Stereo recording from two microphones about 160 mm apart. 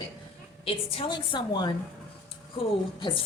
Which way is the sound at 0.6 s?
35° left (ahead or behind).